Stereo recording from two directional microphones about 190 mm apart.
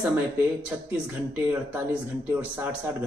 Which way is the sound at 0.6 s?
5° right (ahead or behind).